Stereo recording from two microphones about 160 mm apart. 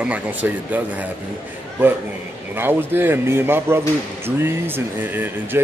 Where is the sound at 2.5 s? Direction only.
15° right (ahead or behind).